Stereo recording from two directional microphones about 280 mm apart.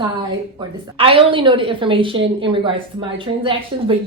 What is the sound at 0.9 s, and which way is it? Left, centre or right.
Speech, centre.